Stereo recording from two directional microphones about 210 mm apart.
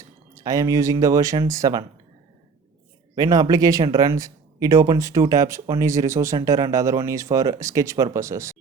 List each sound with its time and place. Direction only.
0.3 s speech: 15° right (ahead or behind)
3.2 s speech: 15° right (ahead or behind)